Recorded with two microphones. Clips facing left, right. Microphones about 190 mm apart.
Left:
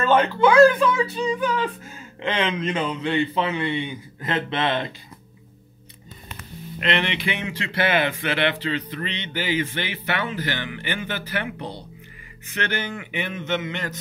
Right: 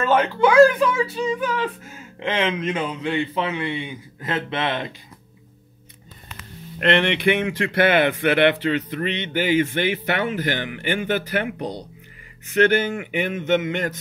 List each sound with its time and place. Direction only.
0.0 s speech: 10° right (ahead or behind)
6.8 s speech: 60° right (ahead or behind)